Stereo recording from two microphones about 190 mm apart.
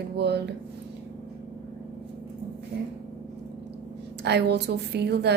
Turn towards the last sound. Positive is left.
turn(degrees=-60)  # may be behind; listen again after turning